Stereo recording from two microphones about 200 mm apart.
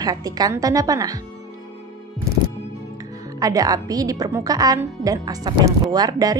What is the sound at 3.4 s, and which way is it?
A woman's voice, 15° right (ahead or behind).